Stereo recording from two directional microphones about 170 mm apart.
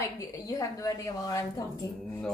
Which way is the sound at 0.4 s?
20° left (ahead or behind).